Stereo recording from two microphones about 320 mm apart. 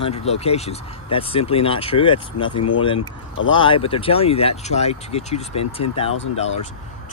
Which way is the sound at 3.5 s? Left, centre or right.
Centre.